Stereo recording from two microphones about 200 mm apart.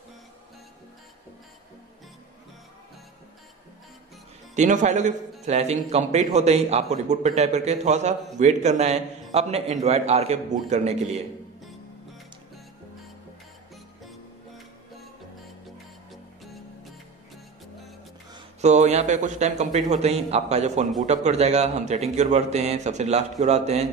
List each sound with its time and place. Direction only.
4.6 s a man's voice: 40° right (ahead or behind)
18.6 s a man's voice: 35° right (ahead or behind)